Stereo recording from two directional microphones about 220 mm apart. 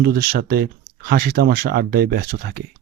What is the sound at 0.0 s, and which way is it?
Speech, 45° right (ahead or behind).